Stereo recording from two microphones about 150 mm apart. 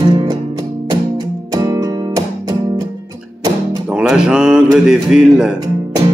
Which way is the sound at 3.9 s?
5° right (ahead or behind).